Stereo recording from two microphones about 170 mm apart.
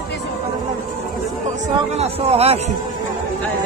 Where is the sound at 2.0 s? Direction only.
40° right (ahead or behind).